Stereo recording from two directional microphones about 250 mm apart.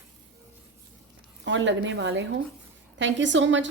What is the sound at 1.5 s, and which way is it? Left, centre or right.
A woman's voice, right.